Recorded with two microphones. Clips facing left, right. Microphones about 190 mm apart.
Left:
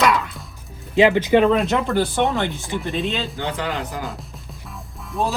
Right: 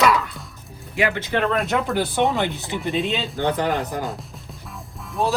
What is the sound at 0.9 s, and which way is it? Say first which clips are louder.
Speech: left 8 dB; 20° left (ahead or behind).